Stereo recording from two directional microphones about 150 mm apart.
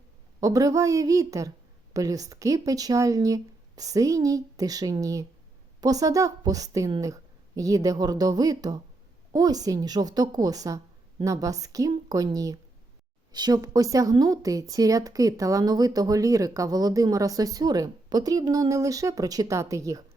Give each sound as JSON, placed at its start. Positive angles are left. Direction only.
{"t": 0.3, "sound": "speech", "side_deg": -25}